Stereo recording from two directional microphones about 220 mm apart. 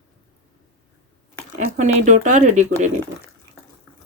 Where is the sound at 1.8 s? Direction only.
35° right (ahead or behind).